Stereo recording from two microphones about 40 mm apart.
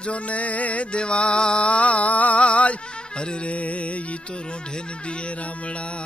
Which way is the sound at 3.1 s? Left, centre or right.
Left.